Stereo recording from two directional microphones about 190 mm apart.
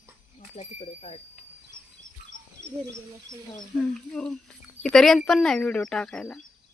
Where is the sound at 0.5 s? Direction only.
35° left (ahead or behind).